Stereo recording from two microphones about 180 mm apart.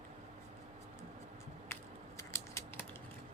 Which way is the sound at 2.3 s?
15° left (ahead or behind).